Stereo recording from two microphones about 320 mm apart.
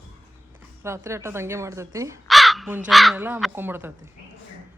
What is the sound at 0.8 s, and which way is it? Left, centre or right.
Speech, centre.